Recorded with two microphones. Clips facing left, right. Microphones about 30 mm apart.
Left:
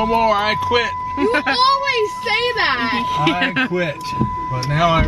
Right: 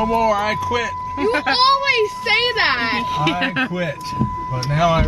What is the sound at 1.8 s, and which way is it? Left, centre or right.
Speech, right.